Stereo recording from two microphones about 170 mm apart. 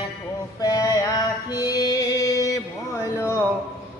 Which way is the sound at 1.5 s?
25° left (ahead or behind).